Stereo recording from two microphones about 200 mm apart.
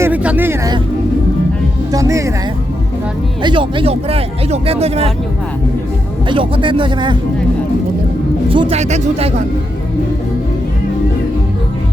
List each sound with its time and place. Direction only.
0.0 s speech: 5° right (ahead or behind)
1.9 s speech: 15° right (ahead or behind)
3.4 s speech: 25° right (ahead or behind)
6.2 s speech: 25° right (ahead or behind)
8.4 s speech: 25° right (ahead or behind)